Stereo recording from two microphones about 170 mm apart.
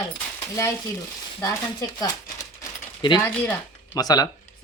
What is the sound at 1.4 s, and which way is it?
Speech, 20° left (ahead or behind).